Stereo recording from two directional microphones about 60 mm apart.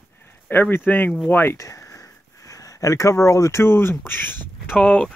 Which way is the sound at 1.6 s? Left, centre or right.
Left.